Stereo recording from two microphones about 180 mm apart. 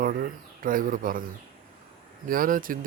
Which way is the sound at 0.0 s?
50° right (ahead or behind).